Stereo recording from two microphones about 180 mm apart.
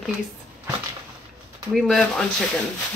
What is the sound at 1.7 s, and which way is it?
Speech, centre (ahead or behind).